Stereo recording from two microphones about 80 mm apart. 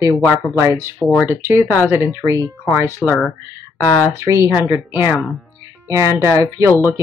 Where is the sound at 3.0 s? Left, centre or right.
Left.